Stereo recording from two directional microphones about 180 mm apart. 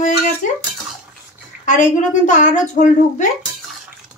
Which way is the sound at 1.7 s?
45° left (ahead or behind).